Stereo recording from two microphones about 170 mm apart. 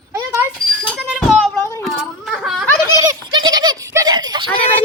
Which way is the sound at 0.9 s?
Centre (ahead or behind).